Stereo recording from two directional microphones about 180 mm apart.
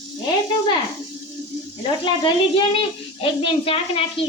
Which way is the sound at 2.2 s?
30° left (ahead or behind).